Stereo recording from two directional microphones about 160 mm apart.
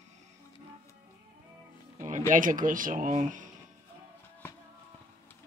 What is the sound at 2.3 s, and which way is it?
Speech, 55° right (ahead or behind).